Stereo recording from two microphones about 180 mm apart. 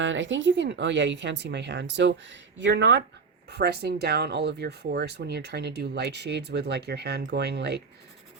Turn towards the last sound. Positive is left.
turn(degrees=-65)  # may be behind; listen again after turning